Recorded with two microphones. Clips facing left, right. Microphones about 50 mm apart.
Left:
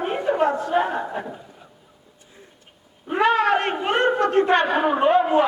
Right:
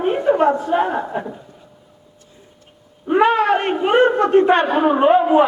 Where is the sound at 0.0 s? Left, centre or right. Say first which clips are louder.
Right 5 dB; centre.